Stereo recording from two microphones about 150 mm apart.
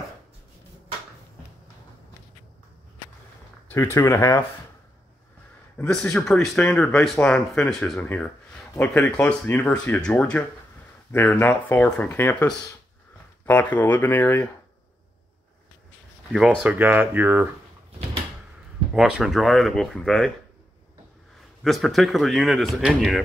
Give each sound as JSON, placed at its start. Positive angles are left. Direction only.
{"t": 3.6, "sound": "speech", "side_deg": 15}
{"t": 5.8, "sound": "speech", "side_deg": 5}
{"t": 13.5, "sound": "speech", "side_deg": 10}
{"t": 16.3, "sound": "speech", "side_deg": -5}
{"t": 18.9, "sound": "speech", "side_deg": -5}
{"t": 21.6, "sound": "speech", "side_deg": 0}